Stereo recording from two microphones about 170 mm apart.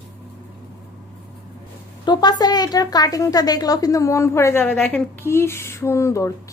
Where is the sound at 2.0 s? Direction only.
25° left (ahead or behind).